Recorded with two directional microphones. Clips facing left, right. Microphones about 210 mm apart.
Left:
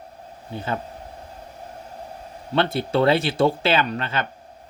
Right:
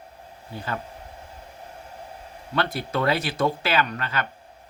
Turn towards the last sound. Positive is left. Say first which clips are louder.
# left 2 dB
turn(degrees=25)  # may be behind; listen again after turning